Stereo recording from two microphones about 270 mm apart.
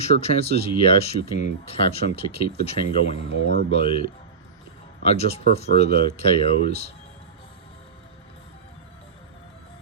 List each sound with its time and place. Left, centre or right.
0.0 s speech: left
5.0 s speech: left